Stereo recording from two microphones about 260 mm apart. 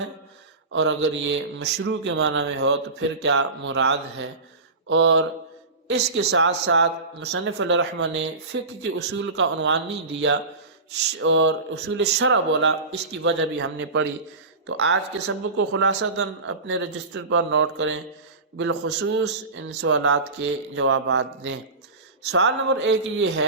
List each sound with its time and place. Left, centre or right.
0.7 s speech: right
20.1 s speech: right